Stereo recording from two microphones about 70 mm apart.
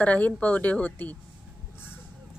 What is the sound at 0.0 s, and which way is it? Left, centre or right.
A woman's voice, left.